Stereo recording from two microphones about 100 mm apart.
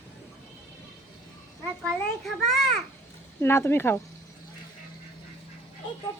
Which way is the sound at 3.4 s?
25° left (ahead or behind).